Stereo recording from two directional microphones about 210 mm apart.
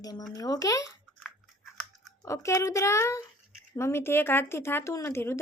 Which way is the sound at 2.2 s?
15° left (ahead or behind).